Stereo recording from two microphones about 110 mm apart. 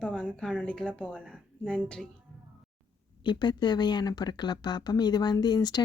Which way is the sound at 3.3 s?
40° left (ahead or behind).